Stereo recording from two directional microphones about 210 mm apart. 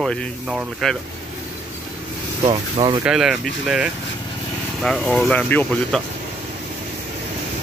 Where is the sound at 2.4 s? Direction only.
20° right (ahead or behind).